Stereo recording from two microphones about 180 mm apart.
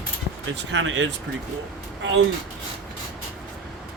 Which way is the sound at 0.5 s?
90° right.